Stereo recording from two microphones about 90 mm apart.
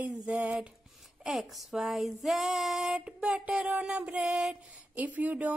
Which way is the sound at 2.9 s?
10° right (ahead or behind).